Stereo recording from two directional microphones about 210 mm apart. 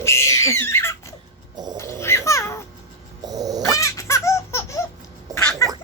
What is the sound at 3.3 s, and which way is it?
Cat, 15° right (ahead or behind).